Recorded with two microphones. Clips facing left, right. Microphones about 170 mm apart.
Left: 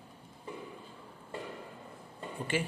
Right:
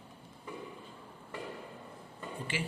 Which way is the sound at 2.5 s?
50° left (ahead or behind).